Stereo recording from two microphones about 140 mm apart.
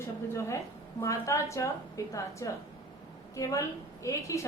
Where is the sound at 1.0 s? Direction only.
20° left (ahead or behind).